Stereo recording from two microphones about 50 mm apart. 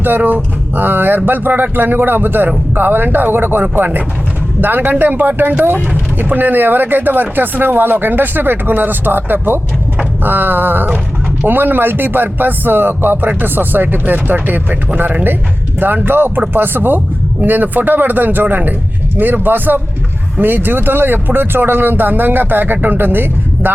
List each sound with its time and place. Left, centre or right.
0.0 s speech: right